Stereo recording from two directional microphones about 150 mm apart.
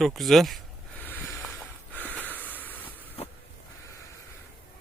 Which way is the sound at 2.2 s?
10° left (ahead or behind).